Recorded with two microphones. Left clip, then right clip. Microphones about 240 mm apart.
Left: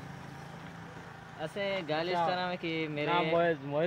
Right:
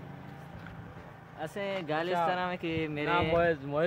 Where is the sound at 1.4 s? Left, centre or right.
Centre.